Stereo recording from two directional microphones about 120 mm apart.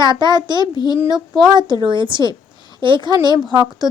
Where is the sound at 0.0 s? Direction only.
40° right (ahead or behind).